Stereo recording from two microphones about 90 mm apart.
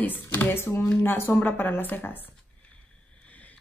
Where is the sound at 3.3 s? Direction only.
15° left (ahead or behind).